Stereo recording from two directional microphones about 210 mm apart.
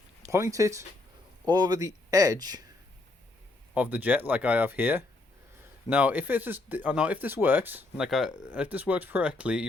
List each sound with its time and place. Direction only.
0.3 s speech: 15° right (ahead or behind)
3.8 s speech: 10° right (ahead or behind)